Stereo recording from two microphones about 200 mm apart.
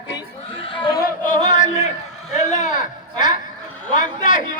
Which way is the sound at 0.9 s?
45° left (ahead or behind).